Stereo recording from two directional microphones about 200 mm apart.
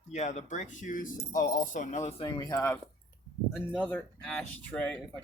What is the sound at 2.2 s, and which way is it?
Speech, 20° left (ahead or behind).